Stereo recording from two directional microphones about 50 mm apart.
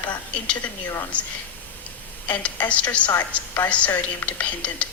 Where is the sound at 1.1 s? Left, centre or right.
Left.